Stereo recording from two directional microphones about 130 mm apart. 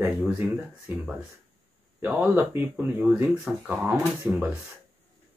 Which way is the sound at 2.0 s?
15° right (ahead or behind).